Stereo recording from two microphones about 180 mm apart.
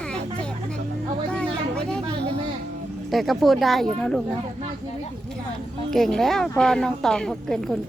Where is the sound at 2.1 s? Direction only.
65° right (ahead or behind).